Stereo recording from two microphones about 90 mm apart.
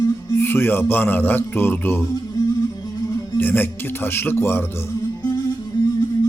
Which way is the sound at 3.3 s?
20° left (ahead or behind).